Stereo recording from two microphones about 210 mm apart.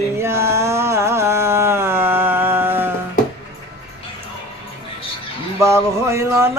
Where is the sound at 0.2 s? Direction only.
10° right (ahead or behind).